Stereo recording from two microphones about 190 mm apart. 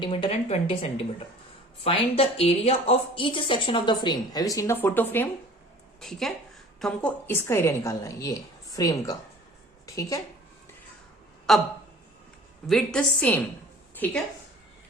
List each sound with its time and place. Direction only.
0.0 s a woman's voice: 25° left (ahead or behind)
11.5 s a woman's voice: centre (ahead or behind)
12.6 s a woman's voice: 5° left (ahead or behind)